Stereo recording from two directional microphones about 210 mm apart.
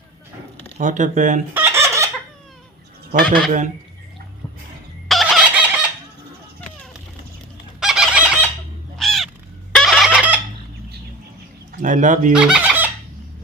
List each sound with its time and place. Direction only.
0.6 s speech: 35° right (ahead or behind)
1.5 s chicken: 10° right (ahead or behind)
3.2 s speech: 5° left (ahead or behind)
5.0 s chicken: centre (ahead or behind)
7.8 s fowl: centre (ahead or behind)
9.0 s crow: centre (ahead or behind)
9.7 s fowl: centre (ahead or behind)
11.8 s speech: 35° right (ahead or behind)
12.3 s speech: 5° right (ahead or behind)